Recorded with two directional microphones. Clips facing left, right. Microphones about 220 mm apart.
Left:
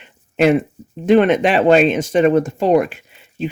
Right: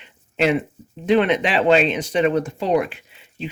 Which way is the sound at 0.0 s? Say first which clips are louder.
Left 5 dB; 50° left (ahead or behind).